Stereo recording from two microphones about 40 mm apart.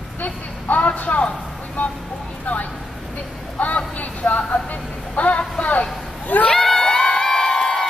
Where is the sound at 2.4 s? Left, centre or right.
Left.